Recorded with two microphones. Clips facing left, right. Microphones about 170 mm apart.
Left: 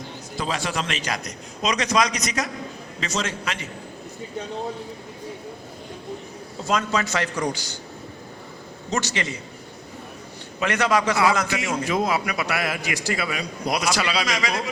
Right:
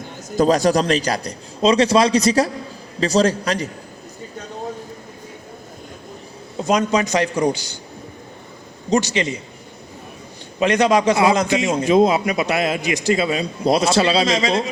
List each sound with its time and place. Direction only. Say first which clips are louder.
0.0 s a man's voice: right 12 dB; 45° right (ahead or behind)
6.6 s a man's voice: right 6 dB; 20° right (ahead or behind)
8.9 s a man's voice: right 8 dB; 15° right (ahead or behind)
10.6 s a man's voice: right 6 dB; 20° right (ahead or behind)